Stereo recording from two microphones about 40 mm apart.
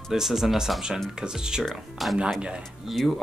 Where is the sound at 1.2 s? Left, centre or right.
Centre.